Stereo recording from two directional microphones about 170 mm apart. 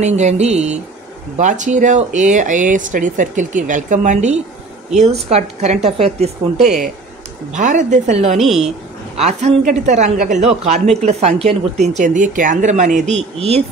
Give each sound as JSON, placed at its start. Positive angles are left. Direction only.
{"t": 0.0, "sound": "speech", "side_deg": -40}
{"t": 8.4, "sound": "a woman's voice", "side_deg": 0}
{"t": 9.1, "sound": "speech", "side_deg": -40}